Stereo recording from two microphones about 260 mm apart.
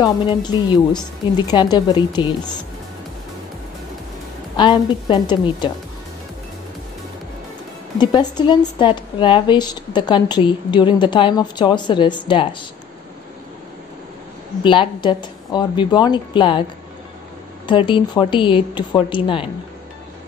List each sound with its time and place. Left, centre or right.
0.0 s a woman's voice: centre
4.6 s a woman's voice: centre
8.0 s a woman's voice: centre
14.6 s a woman's voice: centre
17.6 s speech: centre